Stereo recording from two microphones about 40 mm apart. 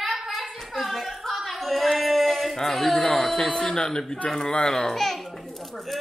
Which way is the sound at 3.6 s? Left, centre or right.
Left.